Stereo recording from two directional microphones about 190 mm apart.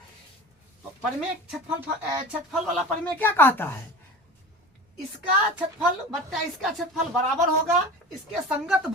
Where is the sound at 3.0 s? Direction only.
10° left (ahead or behind).